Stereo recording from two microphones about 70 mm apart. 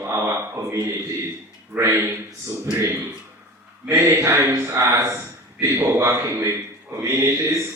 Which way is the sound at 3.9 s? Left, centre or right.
Right.